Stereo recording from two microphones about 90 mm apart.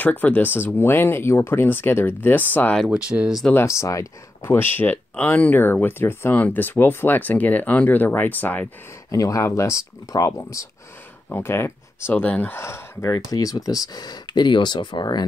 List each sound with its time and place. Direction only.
0.0 s speech: 20° left (ahead or behind)
2.9 s speech: 10° right (ahead or behind)
3.5 s speech: 35° left (ahead or behind)
4.6 s speech: 25° left (ahead or behind)
9.1 s speech: 35° left (ahead or behind)
11.2 s speech: 25° left (ahead or behind)
13.1 s speech: 40° left (ahead or behind)